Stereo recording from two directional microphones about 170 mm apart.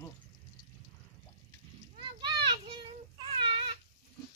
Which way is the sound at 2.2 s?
25° right (ahead or behind).